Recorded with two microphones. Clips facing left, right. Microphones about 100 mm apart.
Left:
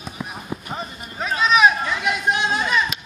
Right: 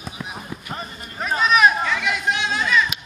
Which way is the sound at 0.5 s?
25° left (ahead or behind).